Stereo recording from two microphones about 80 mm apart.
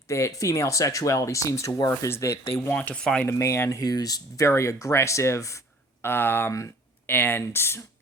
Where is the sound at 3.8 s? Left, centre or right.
Left.